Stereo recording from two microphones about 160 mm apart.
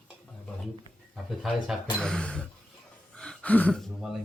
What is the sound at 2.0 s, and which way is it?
Speech, 5° left (ahead or behind).